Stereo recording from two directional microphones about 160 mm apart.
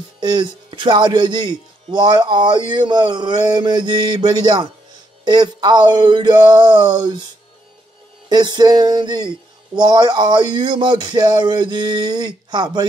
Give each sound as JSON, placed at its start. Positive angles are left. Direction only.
{"t": 0.2, "sound": "a man's voice", "side_deg": -30}
{"t": 8.3, "sound": "a man's voice", "side_deg": -25}